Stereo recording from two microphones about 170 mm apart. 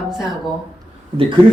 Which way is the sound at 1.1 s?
30° right (ahead or behind).